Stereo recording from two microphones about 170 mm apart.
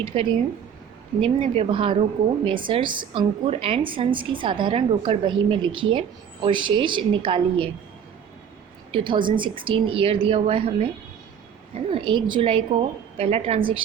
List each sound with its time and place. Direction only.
0.0 s a woman's voice: 30° right (ahead or behind)
9.0 s a woman's voice: 30° right (ahead or behind)
11.9 s a woman's voice: 30° right (ahead or behind)